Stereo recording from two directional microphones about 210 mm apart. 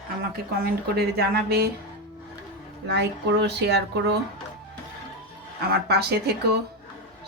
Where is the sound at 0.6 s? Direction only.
50° right (ahead or behind).